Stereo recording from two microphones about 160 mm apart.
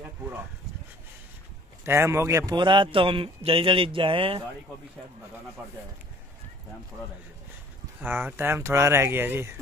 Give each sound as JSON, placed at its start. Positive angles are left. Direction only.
{"t": 1.9, "sound": "speech", "side_deg": -15}
{"t": 2.5, "sound": "a man's voice", "side_deg": -30}
{"t": 8.0, "sound": "speech", "side_deg": -15}